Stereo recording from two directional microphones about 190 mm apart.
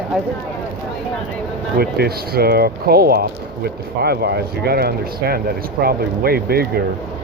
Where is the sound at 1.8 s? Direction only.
55° right (ahead or behind).